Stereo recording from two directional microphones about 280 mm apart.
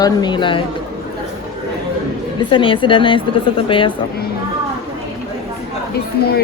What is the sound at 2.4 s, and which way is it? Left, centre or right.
A woman's voice, centre.